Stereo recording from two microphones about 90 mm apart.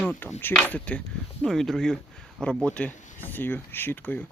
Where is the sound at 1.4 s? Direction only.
5° left (ahead or behind); by 4.2 s 20° left (ahead or behind).